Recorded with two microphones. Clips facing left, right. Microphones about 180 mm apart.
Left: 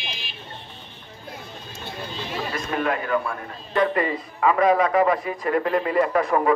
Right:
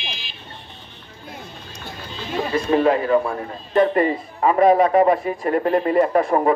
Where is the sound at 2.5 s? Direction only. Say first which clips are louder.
Right 9 dB; 30° right (ahead or behind).